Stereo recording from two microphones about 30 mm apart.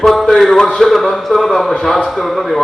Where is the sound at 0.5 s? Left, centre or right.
Centre.